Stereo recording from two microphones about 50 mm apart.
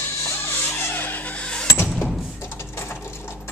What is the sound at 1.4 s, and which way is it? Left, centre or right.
Vehicle, centre.